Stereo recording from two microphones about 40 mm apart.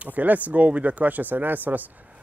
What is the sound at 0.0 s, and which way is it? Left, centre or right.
Speech, right.